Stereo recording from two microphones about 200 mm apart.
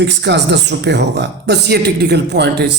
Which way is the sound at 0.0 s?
60° right (ahead or behind).